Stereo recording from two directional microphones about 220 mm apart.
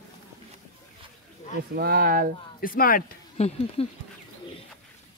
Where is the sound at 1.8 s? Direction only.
45° right (ahead or behind).